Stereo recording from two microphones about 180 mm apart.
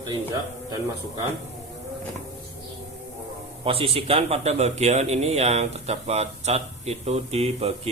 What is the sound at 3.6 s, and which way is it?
Speech, 30° right (ahead or behind).